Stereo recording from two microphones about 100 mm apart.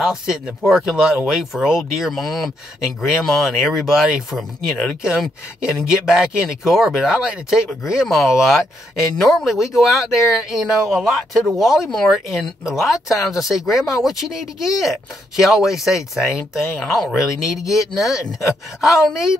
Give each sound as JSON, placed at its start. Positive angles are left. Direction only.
{"t": 0.0, "sound": "speech", "side_deg": -5}
{"t": 17.9, "sound": "speech", "side_deg": 30}
{"t": 18.8, "sound": "speech", "side_deg": -5}